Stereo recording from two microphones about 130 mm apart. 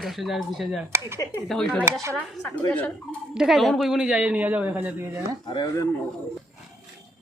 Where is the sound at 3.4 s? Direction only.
Centre (ahead or behind).